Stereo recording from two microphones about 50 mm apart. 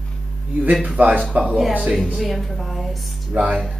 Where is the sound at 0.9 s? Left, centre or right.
Right.